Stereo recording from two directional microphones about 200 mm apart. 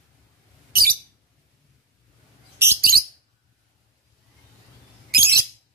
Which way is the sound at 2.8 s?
50° right (ahead or behind).